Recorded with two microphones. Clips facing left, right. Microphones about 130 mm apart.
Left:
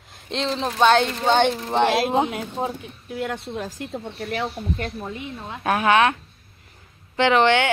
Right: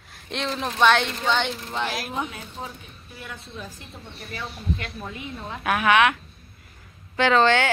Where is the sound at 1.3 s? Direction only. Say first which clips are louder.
Left 7 dB; 50° left (ahead or behind); by 4.4 s 80° left.